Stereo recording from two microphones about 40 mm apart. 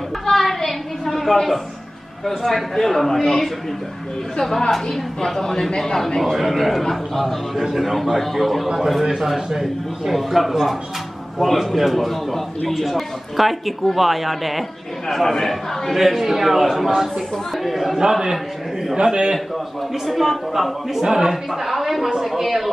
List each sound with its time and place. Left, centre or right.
0.3 s a sound: centre
2.2 s a man's voice: centre
6.3 s a man's voice: centre
16.0 s a man's voice: centre
20.1 s a man's voice: centre
21.5 s a man's voice: centre